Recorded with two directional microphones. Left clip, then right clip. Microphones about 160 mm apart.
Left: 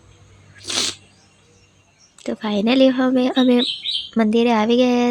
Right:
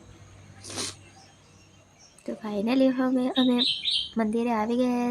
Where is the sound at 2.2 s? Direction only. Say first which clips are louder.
Left 9 dB; 40° left (ahead or behind).